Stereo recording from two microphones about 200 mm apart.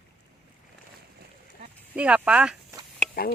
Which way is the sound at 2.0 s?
5° right (ahead or behind).